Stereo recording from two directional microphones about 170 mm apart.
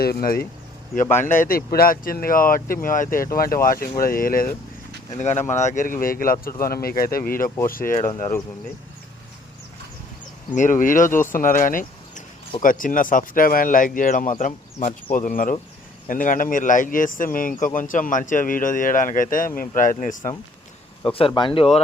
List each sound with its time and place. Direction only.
0.0 s speech: 60° left (ahead or behind)
1.2 s speech: 50° left (ahead or behind)
5.1 s a man's voice: 45° left (ahead or behind)
8.0 s speech: 15° left (ahead or behind)
10.5 s a man's voice: 50° left (ahead or behind)
21.0 s speech: 30° left (ahead or behind)